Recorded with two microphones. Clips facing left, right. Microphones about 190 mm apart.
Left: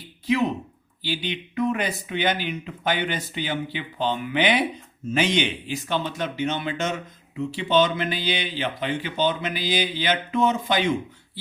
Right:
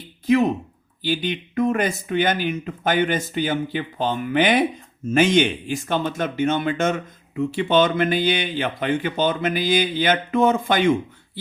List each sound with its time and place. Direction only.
0.3 s speech: 45° right (ahead or behind)